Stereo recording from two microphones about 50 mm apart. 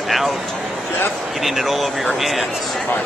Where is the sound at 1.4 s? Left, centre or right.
Centre.